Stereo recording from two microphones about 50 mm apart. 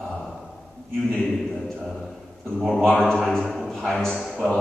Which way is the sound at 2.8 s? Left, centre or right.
Centre.